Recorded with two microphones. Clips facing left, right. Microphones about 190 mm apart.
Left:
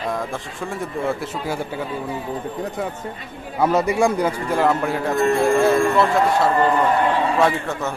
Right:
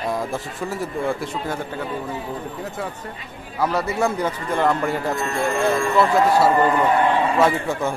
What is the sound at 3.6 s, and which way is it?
A man's voice, 20° left (ahead or behind).